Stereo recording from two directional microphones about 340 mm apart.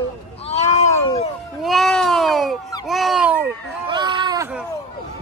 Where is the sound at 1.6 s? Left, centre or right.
Centre.